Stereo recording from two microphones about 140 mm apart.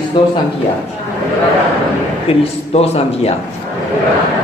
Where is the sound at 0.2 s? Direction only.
35° left (ahead or behind).